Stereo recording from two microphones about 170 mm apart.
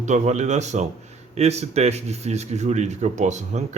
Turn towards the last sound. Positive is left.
turn(degrees=-45)  # may be behind; listen again after turning